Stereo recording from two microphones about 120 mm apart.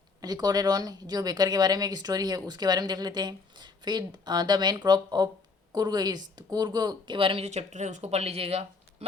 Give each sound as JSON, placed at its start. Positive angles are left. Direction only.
{"t": 0.2, "sound": "speech", "side_deg": -35}